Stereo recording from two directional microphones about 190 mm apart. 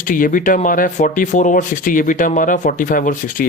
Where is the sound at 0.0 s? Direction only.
45° left (ahead or behind).